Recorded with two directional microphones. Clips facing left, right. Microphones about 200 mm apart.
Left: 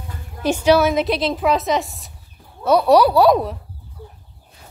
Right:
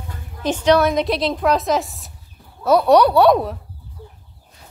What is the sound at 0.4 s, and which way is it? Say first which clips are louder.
A woman's voice: left 1 dB; 10° left (ahead or behind).